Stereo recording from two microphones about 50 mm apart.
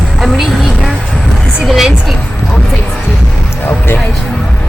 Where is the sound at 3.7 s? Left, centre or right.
Left.